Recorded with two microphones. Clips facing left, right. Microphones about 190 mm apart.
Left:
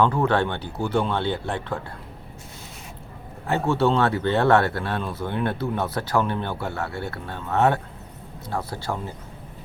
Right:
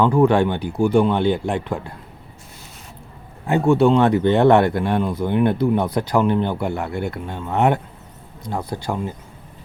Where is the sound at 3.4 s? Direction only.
15° right (ahead or behind).